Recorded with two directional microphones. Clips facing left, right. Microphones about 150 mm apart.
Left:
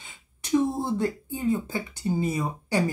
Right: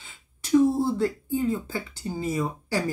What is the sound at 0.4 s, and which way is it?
Speech, 20° left (ahead or behind).